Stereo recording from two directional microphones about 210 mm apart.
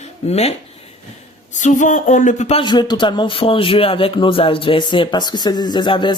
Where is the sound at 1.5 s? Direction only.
35° left (ahead or behind).